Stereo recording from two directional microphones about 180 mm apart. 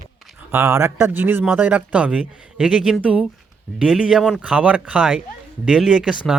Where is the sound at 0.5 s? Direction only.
15° right (ahead or behind).